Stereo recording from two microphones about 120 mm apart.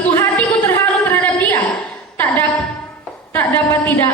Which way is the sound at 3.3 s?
15° left (ahead or behind).